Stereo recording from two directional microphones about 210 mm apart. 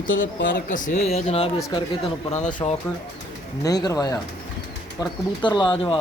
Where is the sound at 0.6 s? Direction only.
40° left (ahead or behind).